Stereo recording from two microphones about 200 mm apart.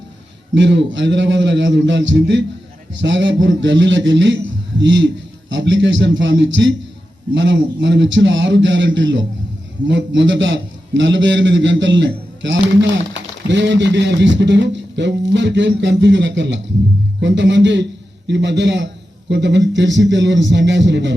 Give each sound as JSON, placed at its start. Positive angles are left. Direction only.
{"t": 0.5, "sound": "a man's voice", "side_deg": -65}